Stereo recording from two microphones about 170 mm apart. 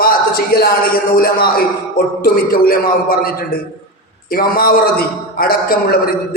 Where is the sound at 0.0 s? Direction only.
65° left (ahead or behind).